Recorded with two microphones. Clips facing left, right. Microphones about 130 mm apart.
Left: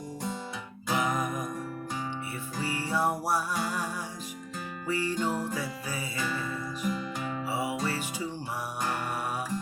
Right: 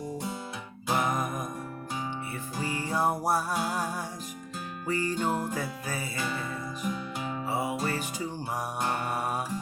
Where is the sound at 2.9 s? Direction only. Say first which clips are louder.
Right 2 dB; 45° right (ahead or behind).